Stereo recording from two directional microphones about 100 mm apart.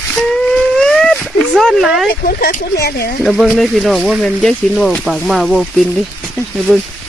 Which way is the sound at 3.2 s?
Centre (ahead or behind).